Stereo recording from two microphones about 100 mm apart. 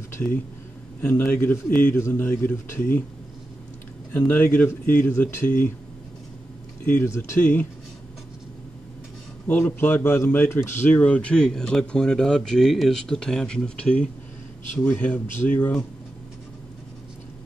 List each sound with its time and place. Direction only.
0.1 s a sound: 20° left (ahead or behind)
1.0 s a man's voice: 25° left (ahead or behind)
4.1 s a man's voice: 20° left (ahead or behind)
6.9 s a man's voice: 25° left (ahead or behind)
9.5 s speech: 20° left (ahead or behind)